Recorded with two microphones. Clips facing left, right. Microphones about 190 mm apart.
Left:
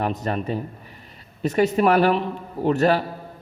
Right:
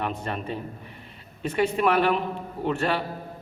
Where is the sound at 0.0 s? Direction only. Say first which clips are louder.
Left 5 dB; 40° left (ahead or behind).